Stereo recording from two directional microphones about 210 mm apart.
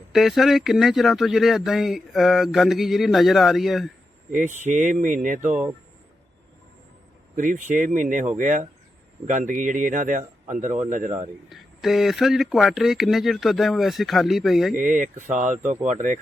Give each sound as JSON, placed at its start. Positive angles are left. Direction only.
{"t": 0.1, "sound": "speech", "side_deg": 0}
{"t": 4.3, "sound": "a man's voice", "side_deg": -35}
{"t": 7.3, "sound": "a man's voice", "side_deg": -40}
{"t": 11.4, "sound": "speech", "side_deg": 0}
{"t": 14.8, "sound": "a man's voice", "side_deg": -40}